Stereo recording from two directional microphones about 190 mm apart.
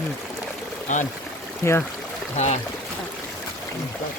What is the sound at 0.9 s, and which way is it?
Speech, 40° left (ahead or behind).